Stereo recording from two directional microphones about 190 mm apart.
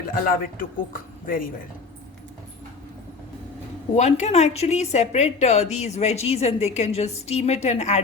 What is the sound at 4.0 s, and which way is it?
A woman's voice, 35° left (ahead or behind).